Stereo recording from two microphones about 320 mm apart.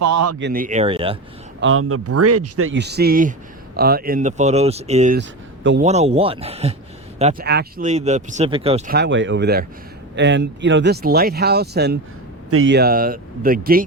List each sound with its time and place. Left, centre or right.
0.0 s speech: right
0.3 s speech: right
1.6 s speech: right; by 9.0 s centre
9.0 s speech: right